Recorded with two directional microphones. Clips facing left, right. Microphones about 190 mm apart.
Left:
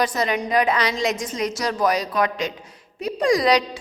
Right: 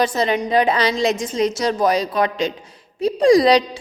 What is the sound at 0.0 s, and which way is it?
A woman's voice, 30° right (ahead or behind).